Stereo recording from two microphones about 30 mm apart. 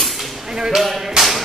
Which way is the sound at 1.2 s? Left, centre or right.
Right.